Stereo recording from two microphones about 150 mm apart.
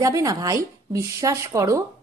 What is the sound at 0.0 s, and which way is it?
A woman's voice, 20° right (ahead or behind).